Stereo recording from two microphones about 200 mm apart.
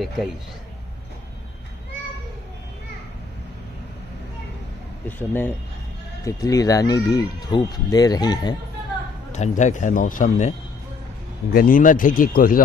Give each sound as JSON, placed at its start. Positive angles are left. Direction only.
{"t": 5.0, "sound": "speech", "side_deg": 10}
{"t": 9.3, "sound": "speech", "side_deg": 35}
{"t": 11.5, "sound": "speech", "side_deg": 45}